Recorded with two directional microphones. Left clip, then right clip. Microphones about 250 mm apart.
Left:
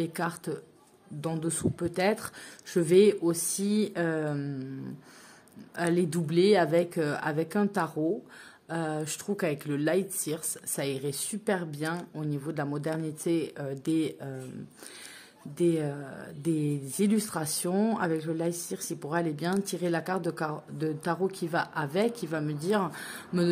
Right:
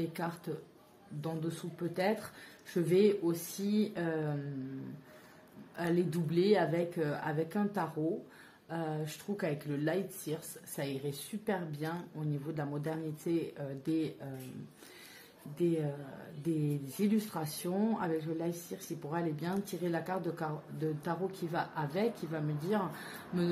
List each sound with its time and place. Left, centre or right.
0.0 s speech: left
5.8 s speech: left
15.5 s speech: left
17.0 s speech: left